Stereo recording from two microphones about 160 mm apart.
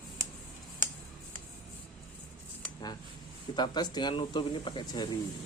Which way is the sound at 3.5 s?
25° left (ahead or behind).